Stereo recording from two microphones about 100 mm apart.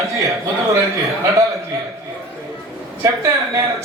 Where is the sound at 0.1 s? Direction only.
30° right (ahead or behind).